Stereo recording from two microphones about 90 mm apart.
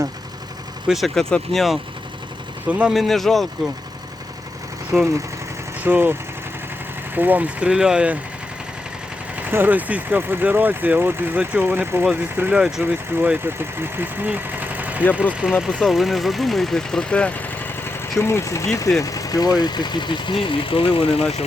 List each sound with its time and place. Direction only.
0.9 s speech: centre (ahead or behind)
2.6 s speech: 15° right (ahead or behind)
2.9 s speech: centre (ahead or behind)
4.9 s speech: 5° right (ahead or behind)
5.8 s speech: 20° right (ahead or behind)
9.4 s speech: 20° right (ahead or behind)
12.5 s speech: 5° right (ahead or behind)
12.8 s speech: 20° right (ahead or behind)
15.6 s speech: centre (ahead or behind)
18.2 s speech: 30° left (ahead or behind); by 21.3 s 90° left